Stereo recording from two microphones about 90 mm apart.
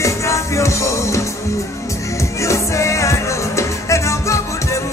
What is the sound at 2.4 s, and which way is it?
Music, 35° left (ahead or behind).